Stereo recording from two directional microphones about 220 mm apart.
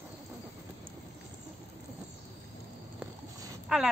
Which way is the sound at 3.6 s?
Centre (ahead or behind).